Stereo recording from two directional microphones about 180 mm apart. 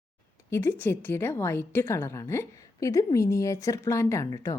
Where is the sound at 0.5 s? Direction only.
10° left (ahead or behind).